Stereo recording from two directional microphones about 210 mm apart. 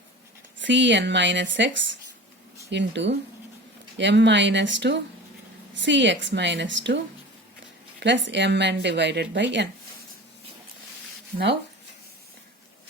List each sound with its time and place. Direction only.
0.6 s speech: 60° right (ahead or behind)